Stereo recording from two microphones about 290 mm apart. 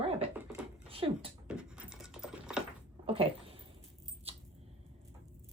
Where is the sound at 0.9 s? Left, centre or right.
Centre.